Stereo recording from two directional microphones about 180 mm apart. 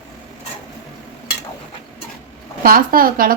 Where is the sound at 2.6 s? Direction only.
50° right (ahead or behind).